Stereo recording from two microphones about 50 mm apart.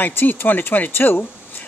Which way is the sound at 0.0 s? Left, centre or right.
Left.